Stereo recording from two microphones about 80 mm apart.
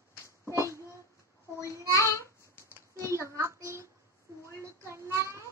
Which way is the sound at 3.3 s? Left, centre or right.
Right.